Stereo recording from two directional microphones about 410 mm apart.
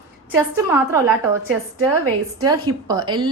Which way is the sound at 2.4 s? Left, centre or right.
Centre.